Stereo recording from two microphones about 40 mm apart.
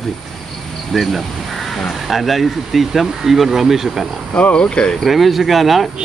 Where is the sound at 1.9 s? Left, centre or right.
Centre.